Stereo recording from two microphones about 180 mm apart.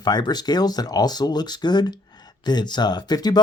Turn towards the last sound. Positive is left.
turn(degrees=20)  # may be behind; listen again after turning